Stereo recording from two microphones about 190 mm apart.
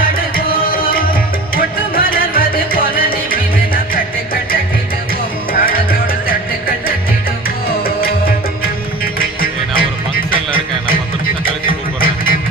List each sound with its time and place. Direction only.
0.0 s tabla: 50° left (ahead or behind)
1.5 s music: 50° left (ahead or behind)
5.5 s music: 50° left (ahead or behind)
9.1 s music: 50° left (ahead or behind)
11.4 s music: 50° left (ahead or behind)